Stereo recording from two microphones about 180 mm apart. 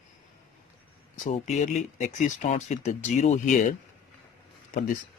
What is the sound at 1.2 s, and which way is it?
Speech, 40° left (ahead or behind).